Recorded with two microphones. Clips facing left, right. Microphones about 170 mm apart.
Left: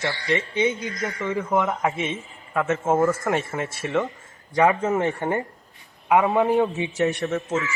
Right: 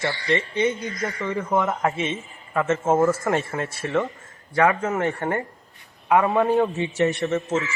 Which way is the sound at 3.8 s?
10° left (ahead or behind).